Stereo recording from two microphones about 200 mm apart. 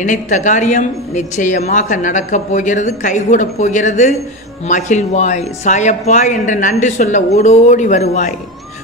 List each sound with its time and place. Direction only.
0.0 s a woman's voice: 40° left (ahead or behind)